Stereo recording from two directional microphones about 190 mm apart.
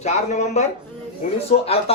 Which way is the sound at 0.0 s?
35° left (ahead or behind).